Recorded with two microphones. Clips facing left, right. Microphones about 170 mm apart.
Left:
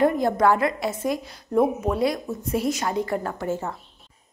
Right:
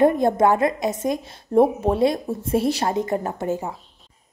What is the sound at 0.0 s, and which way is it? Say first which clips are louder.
A woman's voice: right 3 dB; 20° right (ahead or behind).